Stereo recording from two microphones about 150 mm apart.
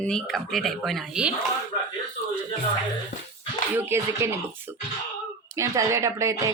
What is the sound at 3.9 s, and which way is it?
Speech, 15° right (ahead or behind).